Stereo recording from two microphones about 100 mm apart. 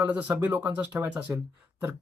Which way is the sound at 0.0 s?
15° right (ahead or behind).